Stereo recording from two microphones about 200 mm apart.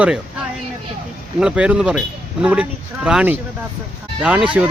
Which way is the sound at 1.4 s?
5° right (ahead or behind).